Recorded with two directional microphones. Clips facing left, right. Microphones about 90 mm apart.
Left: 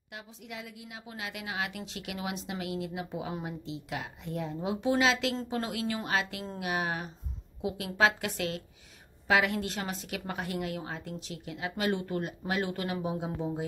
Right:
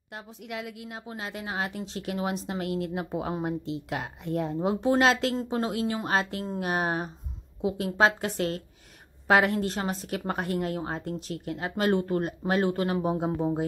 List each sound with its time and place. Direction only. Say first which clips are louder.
0.5 s a woman's voice: right 8 dB; 65° right (ahead or behind)
0.9 s a woman's voice: right 2 dB; 35° right (ahead or behind)
4.6 s speech: right 4 dB; 35° right (ahead or behind)
5.5 s speech: right 5 dB; 30° right (ahead or behind); by 13.7 s 45° right (ahead or behind)